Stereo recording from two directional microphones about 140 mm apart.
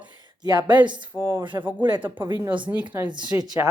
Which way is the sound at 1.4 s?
30° right (ahead or behind).